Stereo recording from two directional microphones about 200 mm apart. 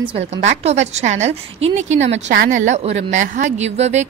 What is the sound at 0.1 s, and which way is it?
A woman's voice, 35° right (ahead or behind).